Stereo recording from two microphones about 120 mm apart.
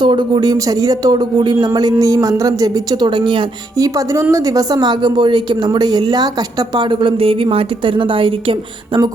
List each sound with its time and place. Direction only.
0.0 s a woman's voice: 40° right (ahead or behind)
3.8 s a woman's voice: 30° right (ahead or behind); by 8.5 s 45° right (ahead or behind)